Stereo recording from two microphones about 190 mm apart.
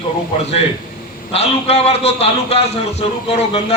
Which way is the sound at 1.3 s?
30° left (ahead or behind).